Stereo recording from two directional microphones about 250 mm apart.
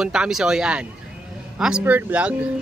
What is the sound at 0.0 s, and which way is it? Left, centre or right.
A man's voice, centre.